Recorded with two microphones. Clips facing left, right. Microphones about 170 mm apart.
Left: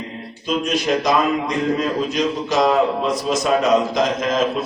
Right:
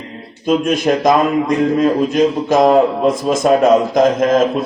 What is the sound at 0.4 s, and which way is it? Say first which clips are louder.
A man's voice: right 6 dB; 50° right (ahead or behind).